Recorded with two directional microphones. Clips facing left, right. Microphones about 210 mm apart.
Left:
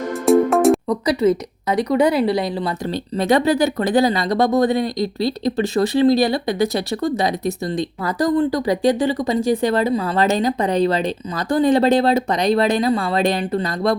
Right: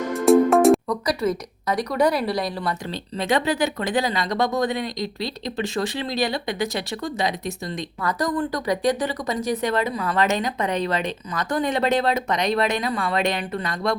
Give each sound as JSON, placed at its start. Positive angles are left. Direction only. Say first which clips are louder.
{"t": 0.3, "sound": "music", "louder": "left 1 dB", "side_deg": 0}
{"t": 0.9, "sound": "a woman's voice", "louder": "left 6 dB", "side_deg": 25}
{"t": 2.9, "sound": "speech", "louder": "left 7 dB", "side_deg": 40}